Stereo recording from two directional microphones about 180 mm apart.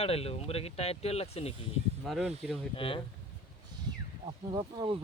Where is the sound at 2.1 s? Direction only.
Centre (ahead or behind).